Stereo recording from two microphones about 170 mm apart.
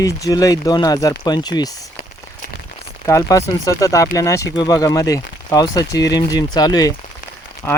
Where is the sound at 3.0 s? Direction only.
20° left (ahead or behind).